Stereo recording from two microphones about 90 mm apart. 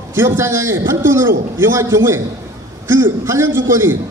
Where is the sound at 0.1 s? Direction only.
25° right (ahead or behind).